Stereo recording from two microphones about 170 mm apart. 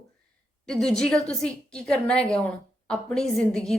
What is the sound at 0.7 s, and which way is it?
A woman's voice, 5° left (ahead or behind).